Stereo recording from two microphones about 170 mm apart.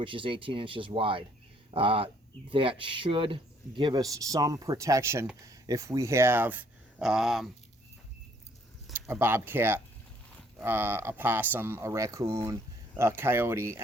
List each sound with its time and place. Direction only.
0.0 s speech: 30° right (ahead or behind); by 7.5 s centre (ahead or behind)
8.9 s speech: 15° right (ahead or behind)